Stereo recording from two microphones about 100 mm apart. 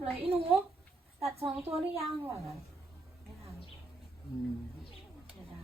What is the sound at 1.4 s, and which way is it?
Speech, 80° right.